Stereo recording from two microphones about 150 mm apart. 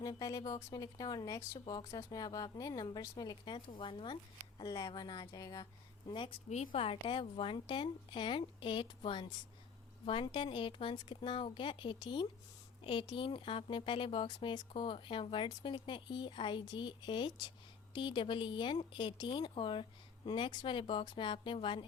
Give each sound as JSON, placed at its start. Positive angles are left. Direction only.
{"t": 0.0, "sound": "speech", "side_deg": 25}
{"t": 6.5, "sound": "speech", "side_deg": 50}